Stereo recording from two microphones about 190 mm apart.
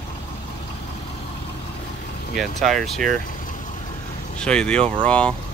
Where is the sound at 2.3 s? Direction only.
Centre (ahead or behind).